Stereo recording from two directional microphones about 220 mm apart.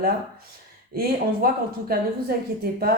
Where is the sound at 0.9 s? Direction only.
45° right (ahead or behind).